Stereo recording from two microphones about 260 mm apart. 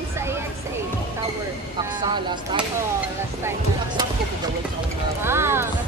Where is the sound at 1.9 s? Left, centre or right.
Centre.